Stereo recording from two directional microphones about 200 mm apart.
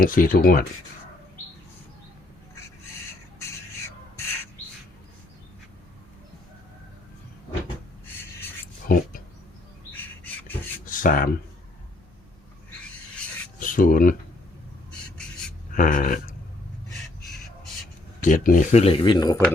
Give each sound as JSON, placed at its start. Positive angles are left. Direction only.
{"t": 0.0, "sound": "speech", "side_deg": 45}
{"t": 8.0, "sound": "writing", "side_deg": 10}
{"t": 10.8, "sound": "a sound", "side_deg": 45}
{"t": 13.6, "sound": "speech", "side_deg": 45}
{"t": 15.7, "sound": "speech", "side_deg": 40}
{"t": 18.2, "sound": "speech", "side_deg": 40}